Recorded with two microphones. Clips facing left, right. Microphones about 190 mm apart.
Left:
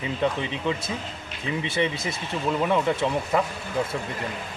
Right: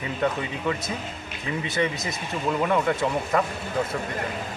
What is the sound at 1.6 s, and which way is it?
Speech, 30° left (ahead or behind).